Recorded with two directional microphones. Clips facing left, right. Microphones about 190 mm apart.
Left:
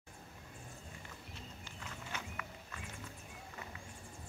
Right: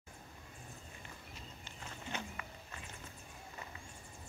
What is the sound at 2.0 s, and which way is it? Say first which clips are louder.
Horse: right 3 dB; 30° right (ahead or behind).